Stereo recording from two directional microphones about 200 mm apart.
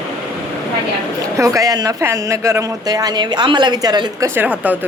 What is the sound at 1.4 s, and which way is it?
Speech, 15° right (ahead or behind).